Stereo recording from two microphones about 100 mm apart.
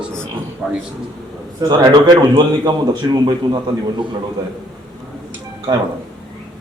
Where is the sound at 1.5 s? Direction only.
45° right (ahead or behind).